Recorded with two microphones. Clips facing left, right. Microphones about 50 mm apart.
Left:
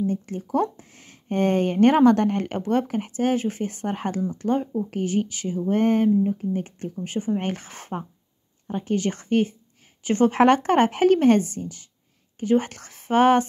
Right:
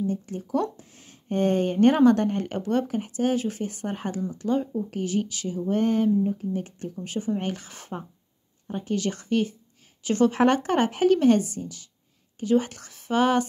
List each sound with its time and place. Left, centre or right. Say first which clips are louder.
0.0 s speech: left 2 dB; left